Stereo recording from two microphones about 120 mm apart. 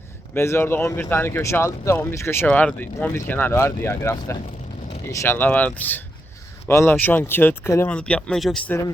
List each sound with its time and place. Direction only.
0.3 s speech: 20° left (ahead or behind)
7.9 s speech: 10° left (ahead or behind)
8.4 s speech: centre (ahead or behind)